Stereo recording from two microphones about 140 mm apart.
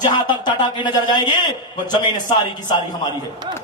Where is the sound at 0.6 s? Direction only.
35° left (ahead or behind).